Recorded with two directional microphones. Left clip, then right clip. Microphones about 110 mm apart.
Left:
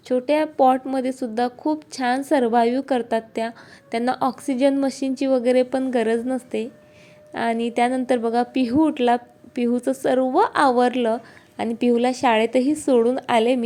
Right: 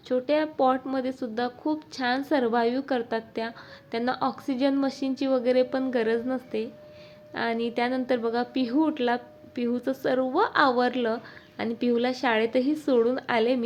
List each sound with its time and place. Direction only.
0.1 s a woman's voice: 45° left (ahead or behind)